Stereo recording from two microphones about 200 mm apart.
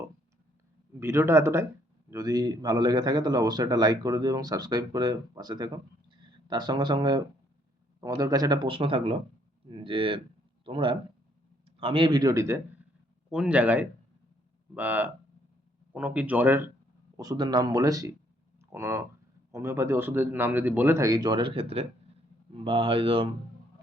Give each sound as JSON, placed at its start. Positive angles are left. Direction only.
{"t": 0.9, "sound": "a man's voice", "side_deg": -15}
{"t": 13.3, "sound": "speech", "side_deg": -5}
{"t": 17.2, "sound": "a man's voice", "side_deg": -20}